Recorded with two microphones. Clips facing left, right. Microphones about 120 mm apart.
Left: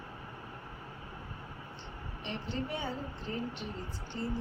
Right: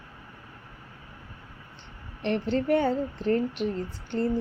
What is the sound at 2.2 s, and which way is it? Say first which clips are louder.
A woman's voice: right 12 dB; 70° right (ahead or behind).